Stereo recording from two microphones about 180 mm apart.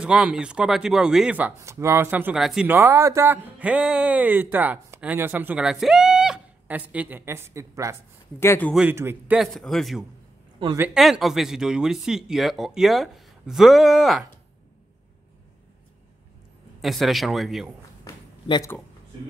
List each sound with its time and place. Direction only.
0.0 s speech: 5° right (ahead or behind)
8.4 s speech: 10° left (ahead or behind)
8.7 s speech: 10° right (ahead or behind)
9.4 s speech: centre (ahead or behind)
16.8 s speech: centre (ahead or behind)
18.0 s a sound: 15° left (ahead or behind)